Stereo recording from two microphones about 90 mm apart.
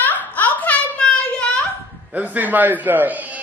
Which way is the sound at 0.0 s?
20° left (ahead or behind).